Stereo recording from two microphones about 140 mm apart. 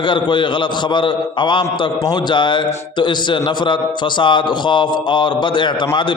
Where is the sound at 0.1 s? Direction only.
35° left (ahead or behind).